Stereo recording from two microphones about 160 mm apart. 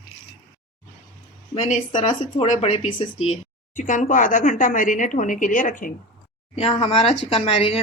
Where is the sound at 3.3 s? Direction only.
50° left (ahead or behind).